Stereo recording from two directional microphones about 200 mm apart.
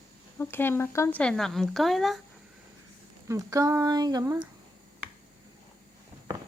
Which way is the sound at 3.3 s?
15° right (ahead or behind).